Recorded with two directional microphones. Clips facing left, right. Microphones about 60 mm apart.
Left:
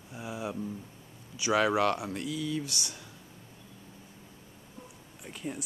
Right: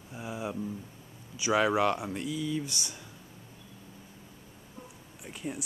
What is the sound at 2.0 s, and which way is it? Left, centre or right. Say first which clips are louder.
Speech: right 1 dB; centre.